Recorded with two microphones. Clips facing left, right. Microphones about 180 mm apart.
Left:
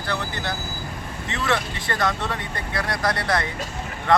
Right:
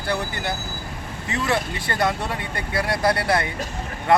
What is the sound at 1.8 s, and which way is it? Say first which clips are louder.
Speech: even; 25° right (ahead or behind).